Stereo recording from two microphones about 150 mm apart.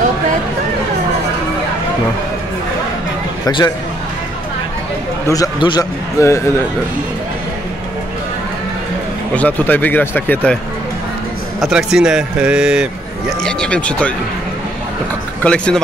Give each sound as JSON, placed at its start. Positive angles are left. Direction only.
{"t": 3.4, "sound": "a man's voice", "side_deg": 25}
{"t": 5.3, "sound": "a man's voice", "side_deg": 25}
{"t": 9.3, "sound": "speech", "side_deg": 10}
{"t": 11.6, "sound": "a man's voice", "side_deg": -5}
{"t": 15.4, "sound": "speech", "side_deg": 5}